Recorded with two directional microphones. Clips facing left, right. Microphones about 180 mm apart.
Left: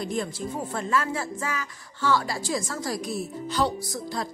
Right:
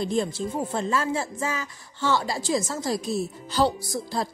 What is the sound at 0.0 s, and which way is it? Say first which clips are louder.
A woman's voice: right 4 dB; 25° right (ahead or behind).